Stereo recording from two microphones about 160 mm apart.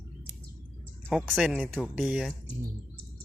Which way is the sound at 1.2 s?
5° right (ahead or behind).